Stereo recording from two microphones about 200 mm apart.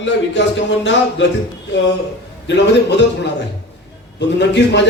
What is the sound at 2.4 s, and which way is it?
Speech, 60° left (ahead or behind).